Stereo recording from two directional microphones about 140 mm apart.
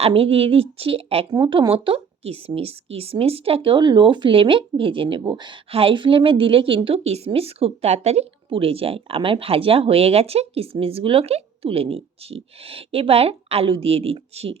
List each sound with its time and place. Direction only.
0.0 s speech: 45° right (ahead or behind)